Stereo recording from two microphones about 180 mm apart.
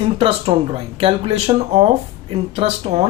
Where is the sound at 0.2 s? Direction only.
30° right (ahead or behind).